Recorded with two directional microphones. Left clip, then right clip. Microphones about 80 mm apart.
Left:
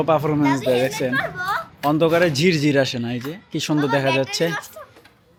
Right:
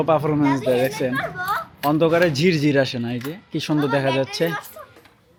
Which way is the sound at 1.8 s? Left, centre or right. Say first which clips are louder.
Even; centre.